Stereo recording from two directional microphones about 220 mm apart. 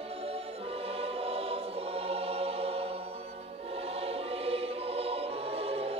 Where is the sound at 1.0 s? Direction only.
25° right (ahead or behind).